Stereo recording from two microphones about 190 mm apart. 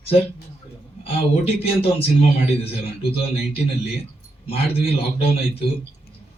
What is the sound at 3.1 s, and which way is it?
Speech, 30° left (ahead or behind).